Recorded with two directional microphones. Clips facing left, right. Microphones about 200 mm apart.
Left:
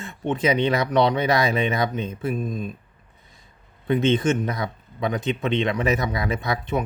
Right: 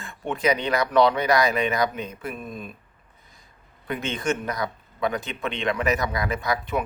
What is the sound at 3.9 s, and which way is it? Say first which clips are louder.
Speech: left 7 dB; 25° left (ahead or behind).